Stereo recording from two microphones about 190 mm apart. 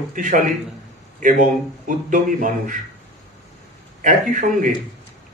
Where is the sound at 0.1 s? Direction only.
45° right (ahead or behind).